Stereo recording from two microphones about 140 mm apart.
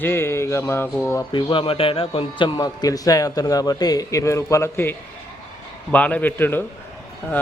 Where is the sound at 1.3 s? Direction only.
35° left (ahead or behind).